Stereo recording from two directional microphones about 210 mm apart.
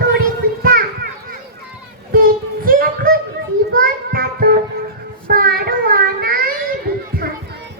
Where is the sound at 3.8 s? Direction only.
45° right (ahead or behind).